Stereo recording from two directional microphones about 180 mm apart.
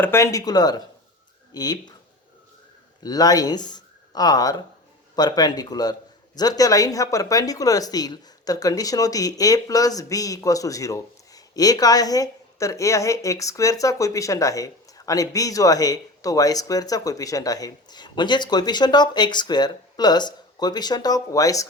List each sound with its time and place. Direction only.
0.0 s speech: 15° left (ahead or behind)
3.0 s speech: 20° left (ahead or behind)